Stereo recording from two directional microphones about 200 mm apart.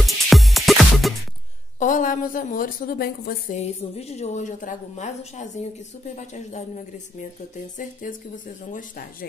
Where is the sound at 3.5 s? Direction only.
30° left (ahead or behind).